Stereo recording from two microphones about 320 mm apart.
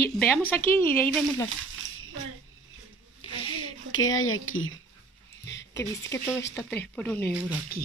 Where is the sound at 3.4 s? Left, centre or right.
Left.